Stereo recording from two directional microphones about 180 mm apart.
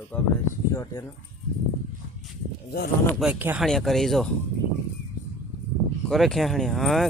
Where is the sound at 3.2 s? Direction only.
10° right (ahead or behind).